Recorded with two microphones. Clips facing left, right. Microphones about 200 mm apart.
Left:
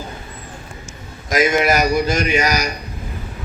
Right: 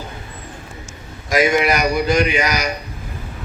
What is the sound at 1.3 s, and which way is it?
A man's voice, 45° left (ahead or behind).